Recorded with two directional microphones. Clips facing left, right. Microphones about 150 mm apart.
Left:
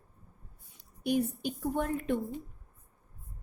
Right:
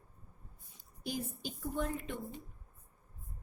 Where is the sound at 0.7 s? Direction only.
65° left (ahead or behind).